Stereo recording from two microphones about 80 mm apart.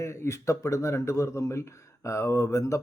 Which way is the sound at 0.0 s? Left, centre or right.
Left.